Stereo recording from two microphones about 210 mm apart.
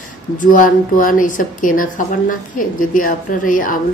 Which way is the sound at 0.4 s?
40° left (ahead or behind).